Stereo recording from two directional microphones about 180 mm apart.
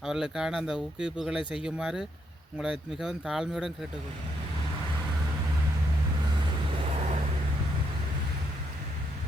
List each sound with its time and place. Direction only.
0.0 s speech: 5° right (ahead or behind)
6.8 s vehicle: 35° right (ahead or behind)